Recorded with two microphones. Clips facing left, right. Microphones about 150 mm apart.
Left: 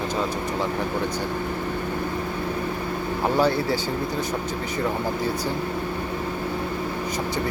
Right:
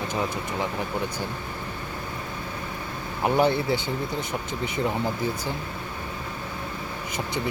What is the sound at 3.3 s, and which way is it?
Speech, 20° right (ahead or behind).